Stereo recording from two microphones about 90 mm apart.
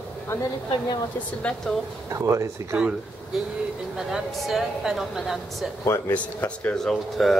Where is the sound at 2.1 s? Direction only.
35° right (ahead or behind).